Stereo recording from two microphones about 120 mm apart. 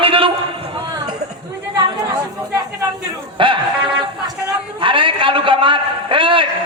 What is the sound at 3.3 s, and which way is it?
Dog, 45° right (ahead or behind).